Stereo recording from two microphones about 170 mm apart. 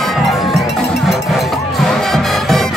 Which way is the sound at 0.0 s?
Centre (ahead or behind).